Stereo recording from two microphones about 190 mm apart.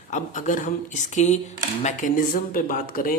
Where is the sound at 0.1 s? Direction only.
40° left (ahead or behind).